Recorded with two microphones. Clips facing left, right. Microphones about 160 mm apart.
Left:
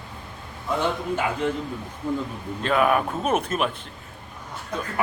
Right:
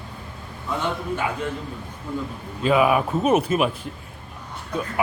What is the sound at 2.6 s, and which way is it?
A man's voice, 5° right (ahead or behind).